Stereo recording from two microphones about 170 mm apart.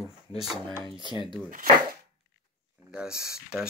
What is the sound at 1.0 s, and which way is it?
Speech, 25° left (ahead or behind).